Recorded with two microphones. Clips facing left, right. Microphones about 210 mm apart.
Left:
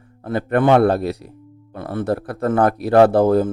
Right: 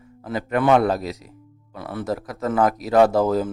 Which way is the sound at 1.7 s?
50° left (ahead or behind).